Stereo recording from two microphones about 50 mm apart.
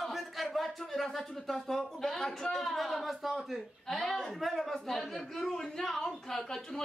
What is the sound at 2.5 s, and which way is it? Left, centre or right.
A man's voice, centre.